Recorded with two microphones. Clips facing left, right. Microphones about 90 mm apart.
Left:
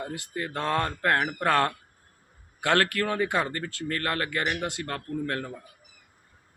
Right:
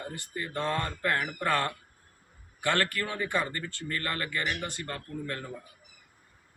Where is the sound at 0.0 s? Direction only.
70° left (ahead or behind).